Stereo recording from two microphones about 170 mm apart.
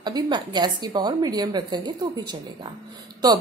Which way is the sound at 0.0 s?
25° right (ahead or behind).